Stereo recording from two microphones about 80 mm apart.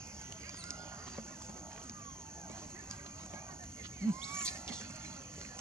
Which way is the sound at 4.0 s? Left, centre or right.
Right.